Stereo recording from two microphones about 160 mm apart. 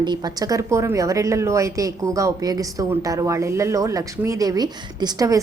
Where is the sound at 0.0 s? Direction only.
25° right (ahead or behind).